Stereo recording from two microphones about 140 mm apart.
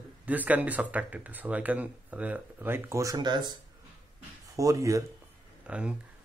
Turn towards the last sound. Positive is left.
turn(degrees=-10)  # may be behind; listen again after turning